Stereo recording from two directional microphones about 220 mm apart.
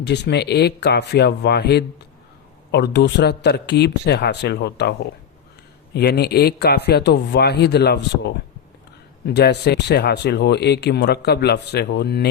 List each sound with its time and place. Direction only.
0.0 s speech: 50° left (ahead or behind)
9.2 s speech: 50° left (ahead or behind)